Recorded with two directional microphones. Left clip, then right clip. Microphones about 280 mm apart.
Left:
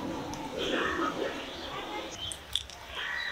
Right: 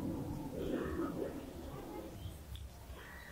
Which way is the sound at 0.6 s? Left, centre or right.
Centre.